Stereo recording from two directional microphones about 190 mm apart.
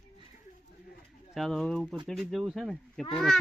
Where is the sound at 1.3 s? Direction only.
Centre (ahead or behind).